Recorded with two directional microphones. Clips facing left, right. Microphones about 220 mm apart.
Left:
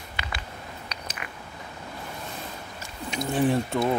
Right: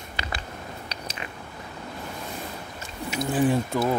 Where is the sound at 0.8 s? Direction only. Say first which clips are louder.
Right 2 dB; 30° right (ahead or behind).